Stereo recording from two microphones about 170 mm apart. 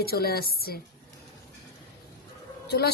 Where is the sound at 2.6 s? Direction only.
70° left (ahead or behind).